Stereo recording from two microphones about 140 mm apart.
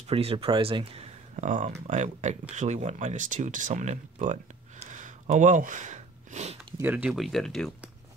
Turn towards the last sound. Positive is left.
turn(degrees=0)  # may be behind; listen again after turning